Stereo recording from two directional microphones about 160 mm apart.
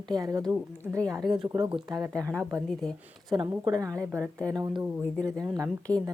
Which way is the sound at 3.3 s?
30° right (ahead or behind).